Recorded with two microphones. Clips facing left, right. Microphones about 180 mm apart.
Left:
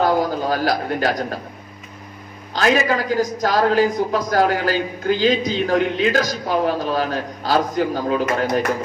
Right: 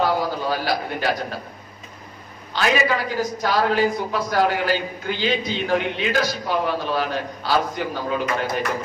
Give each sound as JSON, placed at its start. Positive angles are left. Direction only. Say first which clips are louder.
{"t": 0.0, "sound": "a man's voice", "louder": "left 3 dB", "side_deg": 45}
{"t": 2.5, "sound": "a man's voice", "louder": "left 3 dB", "side_deg": 40}